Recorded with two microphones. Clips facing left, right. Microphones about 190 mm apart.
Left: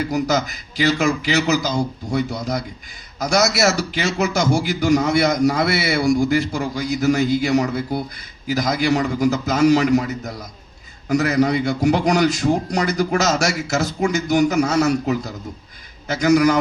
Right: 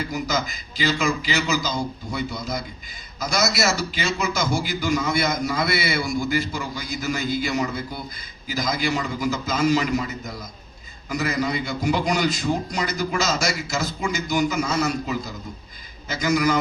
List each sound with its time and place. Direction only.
0.1 s a man's voice: 65° left (ahead or behind)